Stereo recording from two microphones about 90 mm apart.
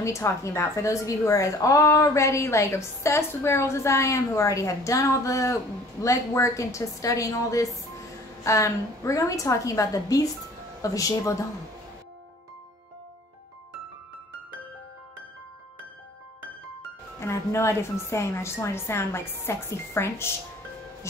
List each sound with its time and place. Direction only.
0.0 s a woman's voice: 35° left (ahead or behind)
17.2 s a woman's voice: 30° left (ahead or behind)